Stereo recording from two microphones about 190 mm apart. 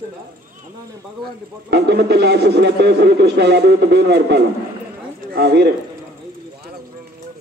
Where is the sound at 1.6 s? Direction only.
60° right (ahead or behind).